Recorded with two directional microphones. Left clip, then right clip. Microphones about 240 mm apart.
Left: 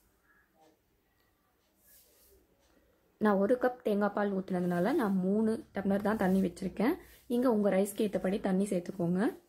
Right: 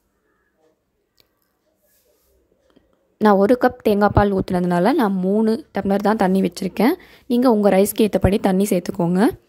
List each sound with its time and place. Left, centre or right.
3.2 s a woman's voice: right